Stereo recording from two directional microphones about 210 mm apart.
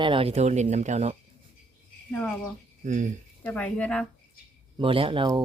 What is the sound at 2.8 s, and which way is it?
Speech, 35° right (ahead or behind).